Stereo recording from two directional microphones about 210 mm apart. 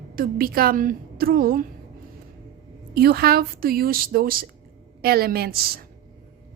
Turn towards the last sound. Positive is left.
turn(degrees=-45)  # may be behind; listen again after turning